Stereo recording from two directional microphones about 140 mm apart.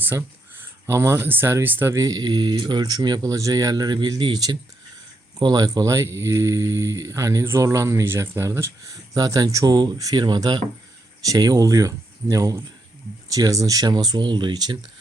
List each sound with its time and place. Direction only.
0.0 s speech: 15° right (ahead or behind); by 14.8 s 30° right (ahead or behind)